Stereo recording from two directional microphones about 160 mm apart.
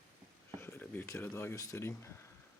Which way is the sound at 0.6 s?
10° left (ahead or behind).